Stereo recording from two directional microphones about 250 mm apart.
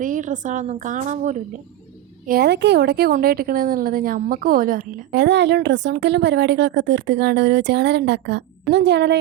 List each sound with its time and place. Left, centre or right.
0.0 s a woman's voice: right